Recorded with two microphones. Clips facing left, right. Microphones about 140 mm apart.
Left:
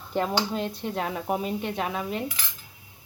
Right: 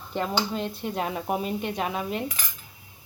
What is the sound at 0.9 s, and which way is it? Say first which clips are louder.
Speech: right 1 dB; 15° right (ahead or behind).